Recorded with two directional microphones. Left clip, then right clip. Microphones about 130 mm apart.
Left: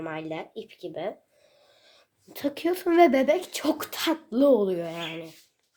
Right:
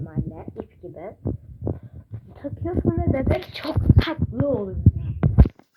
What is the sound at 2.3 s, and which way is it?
Speech, 40° left (ahead or behind).